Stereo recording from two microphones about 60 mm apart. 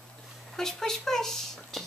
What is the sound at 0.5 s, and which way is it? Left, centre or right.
Speech, centre.